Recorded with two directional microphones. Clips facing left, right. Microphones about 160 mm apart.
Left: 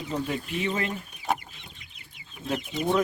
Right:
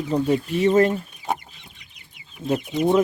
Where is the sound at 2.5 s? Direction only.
15° right (ahead or behind).